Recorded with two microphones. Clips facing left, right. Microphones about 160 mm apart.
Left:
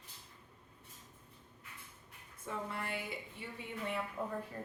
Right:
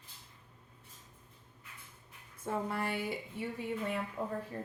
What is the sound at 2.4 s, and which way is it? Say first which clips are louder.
Speech: right 6 dB; 55° right (ahead or behind).